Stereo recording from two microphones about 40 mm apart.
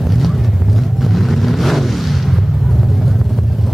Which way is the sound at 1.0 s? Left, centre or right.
Centre.